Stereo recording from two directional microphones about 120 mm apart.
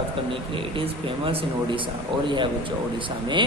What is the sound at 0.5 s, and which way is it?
Speech, 50° right (ahead or behind).